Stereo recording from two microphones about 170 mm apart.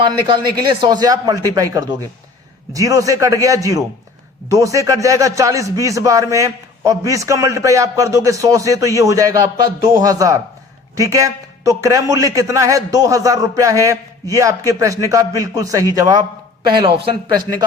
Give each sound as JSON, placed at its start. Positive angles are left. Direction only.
{"t": 0.3, "sound": "a man's voice", "side_deg": -30}